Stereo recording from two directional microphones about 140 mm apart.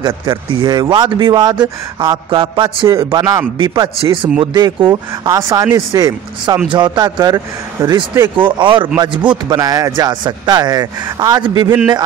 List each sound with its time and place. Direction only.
0.0 s speech: 30° right (ahead or behind)